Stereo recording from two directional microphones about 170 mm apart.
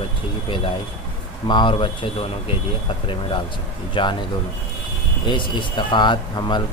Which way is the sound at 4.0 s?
30° left (ahead or behind).